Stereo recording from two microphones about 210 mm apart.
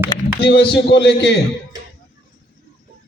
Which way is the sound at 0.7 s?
55° left (ahead or behind).